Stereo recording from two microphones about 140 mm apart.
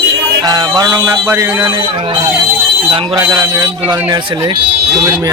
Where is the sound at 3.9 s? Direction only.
30° right (ahead or behind).